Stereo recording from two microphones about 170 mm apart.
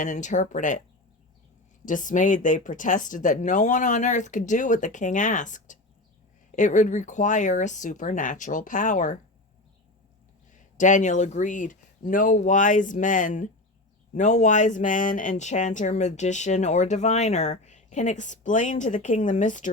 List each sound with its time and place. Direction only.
0.0 s speech: 45° left (ahead or behind)
1.8 s speech: 50° left (ahead or behind)
10.5 s speech: 45° left (ahead or behind)